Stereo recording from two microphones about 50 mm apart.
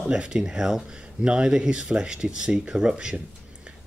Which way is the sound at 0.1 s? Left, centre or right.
Centre.